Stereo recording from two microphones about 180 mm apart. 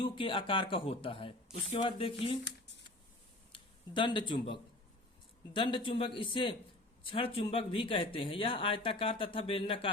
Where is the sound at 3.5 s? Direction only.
25° left (ahead or behind).